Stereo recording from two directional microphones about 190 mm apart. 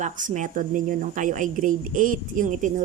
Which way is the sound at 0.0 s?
40° right (ahead or behind).